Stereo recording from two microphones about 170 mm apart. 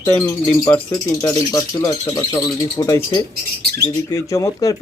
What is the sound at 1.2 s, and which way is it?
Speech, 20° left (ahead or behind).